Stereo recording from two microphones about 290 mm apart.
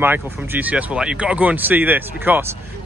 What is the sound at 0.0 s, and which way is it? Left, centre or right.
Speech, centre.